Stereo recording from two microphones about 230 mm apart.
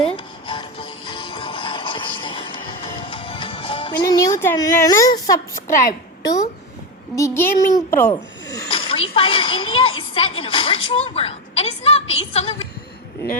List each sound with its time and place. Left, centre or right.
0.0 s music: left
6.2 s speech: centre
7.2 s snake: centre